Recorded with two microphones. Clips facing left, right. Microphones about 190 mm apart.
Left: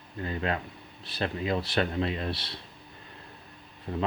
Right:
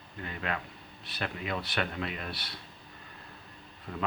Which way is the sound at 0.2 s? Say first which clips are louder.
Left 5 dB; 30° left (ahead or behind).